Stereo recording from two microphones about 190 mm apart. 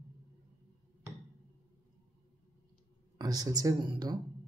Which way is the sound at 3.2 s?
20° right (ahead or behind).